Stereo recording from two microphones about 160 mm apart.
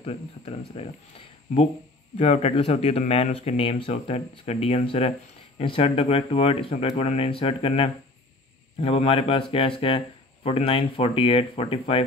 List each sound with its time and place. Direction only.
0.0 s speech: 40° left (ahead or behind)
2.1 s speech: 45° left (ahead or behind)